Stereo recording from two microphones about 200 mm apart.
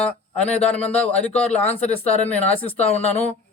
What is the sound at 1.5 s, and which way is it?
Speech, 30° left (ahead or behind).